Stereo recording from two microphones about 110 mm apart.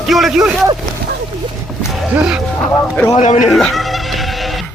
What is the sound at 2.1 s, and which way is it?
Speech, 5° right (ahead or behind).